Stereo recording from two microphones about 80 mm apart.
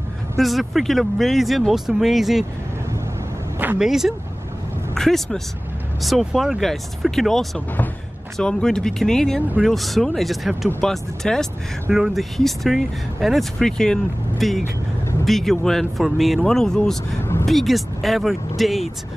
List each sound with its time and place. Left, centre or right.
0.4 s speech: centre
3.7 s speech: centre
4.9 s speech: centre
17.2 s vehicle: left
17.5 s speech: centre